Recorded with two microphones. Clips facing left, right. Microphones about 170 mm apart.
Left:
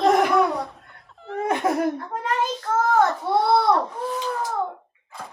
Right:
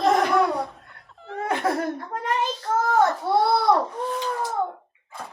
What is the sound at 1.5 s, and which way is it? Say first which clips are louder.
Laughter: left 2 dB; 20° left (ahead or behind).